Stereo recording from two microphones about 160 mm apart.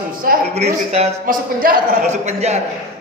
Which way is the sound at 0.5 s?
45° right (ahead or behind).